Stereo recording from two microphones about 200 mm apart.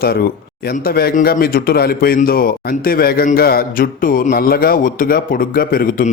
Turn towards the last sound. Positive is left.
turn(degrees=45)  # may be behind; listen again after turning